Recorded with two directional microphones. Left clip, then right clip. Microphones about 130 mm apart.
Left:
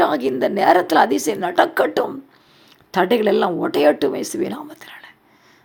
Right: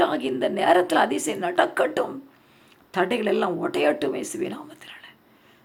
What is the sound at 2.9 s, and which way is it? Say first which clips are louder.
Speech: left 7 dB; 45° left (ahead or behind).